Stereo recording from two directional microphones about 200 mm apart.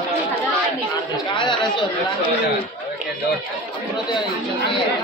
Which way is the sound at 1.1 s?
25° left (ahead or behind).